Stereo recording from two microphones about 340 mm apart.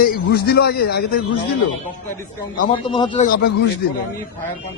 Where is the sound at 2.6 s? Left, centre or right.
Centre.